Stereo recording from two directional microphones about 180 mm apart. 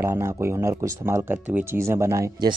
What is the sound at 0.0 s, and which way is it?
Speech, 15° right (ahead or behind).